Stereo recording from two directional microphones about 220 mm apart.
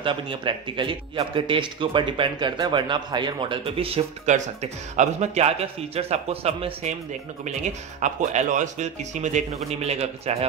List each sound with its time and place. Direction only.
0.0 s speech: 25° right (ahead or behind)